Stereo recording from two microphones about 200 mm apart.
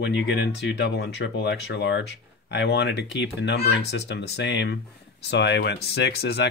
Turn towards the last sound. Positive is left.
turn(degrees=55)  # may be behind; listen again after turning